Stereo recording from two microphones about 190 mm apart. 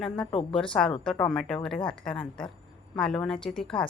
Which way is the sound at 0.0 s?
5° left (ahead or behind).